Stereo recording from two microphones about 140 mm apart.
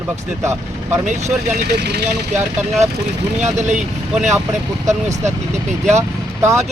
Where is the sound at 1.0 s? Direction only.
55° right (ahead or behind).